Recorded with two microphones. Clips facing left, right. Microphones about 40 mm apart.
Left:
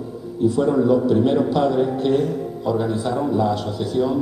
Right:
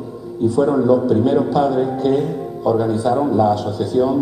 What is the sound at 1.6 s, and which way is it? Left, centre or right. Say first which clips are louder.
A man's voice: right 2 dB; centre.